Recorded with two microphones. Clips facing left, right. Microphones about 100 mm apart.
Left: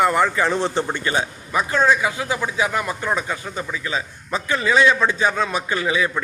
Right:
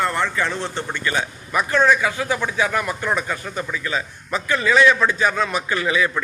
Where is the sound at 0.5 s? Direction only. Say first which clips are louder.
Left 5 dB; 25° left (ahead or behind).